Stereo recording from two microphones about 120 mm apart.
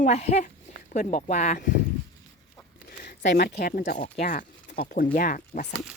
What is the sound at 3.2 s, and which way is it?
Speech, 90° left.